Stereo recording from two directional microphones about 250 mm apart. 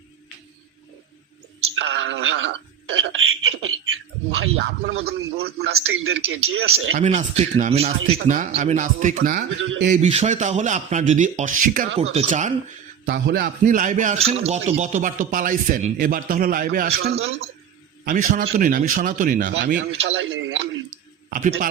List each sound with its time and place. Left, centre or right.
1.7 s a sound: right
5.7 s a man's voice: right
6.9 s a man's voice: right
9.6 s speech: right
10.0 s a man's voice: right
13.1 s a man's voice: right
20.0 s a sound: right
21.3 s a man's voice: right